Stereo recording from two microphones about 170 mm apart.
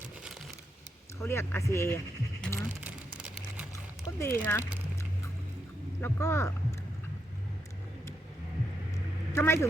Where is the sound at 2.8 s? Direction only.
10° right (ahead or behind).